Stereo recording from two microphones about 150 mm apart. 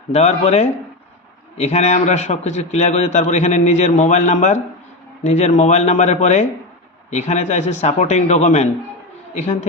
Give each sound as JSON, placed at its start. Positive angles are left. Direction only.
{"t": 0.1, "sound": "a man's voice", "side_deg": 45}